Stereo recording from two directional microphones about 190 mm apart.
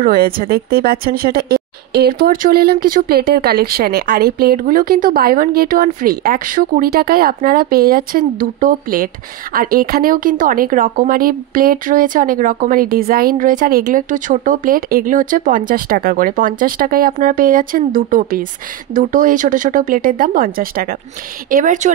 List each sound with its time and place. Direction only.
0.0 s speech: 50° right (ahead or behind)